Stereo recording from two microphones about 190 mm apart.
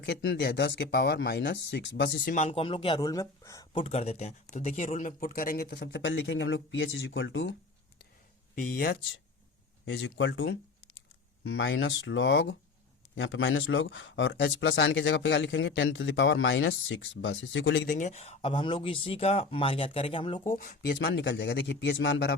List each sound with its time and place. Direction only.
0.0 s speech: 65° left (ahead or behind)
2.3 s speech: 35° left (ahead or behind); by 3.7 s 15° left (ahead or behind)
3.7 s speech: 30° left (ahead or behind); by 7.5 s 75° left (ahead or behind)
8.5 s speech: 45° left (ahead or behind)
9.8 s speech: 85° left
17.8 s speech: 40° left (ahead or behind)
20.4 s speech: 45° left (ahead or behind); by 22.4 s 70° left (ahead or behind)